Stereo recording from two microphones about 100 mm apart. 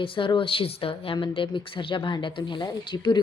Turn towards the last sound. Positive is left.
turn(degrees=55)  # may be behind; listen again after turning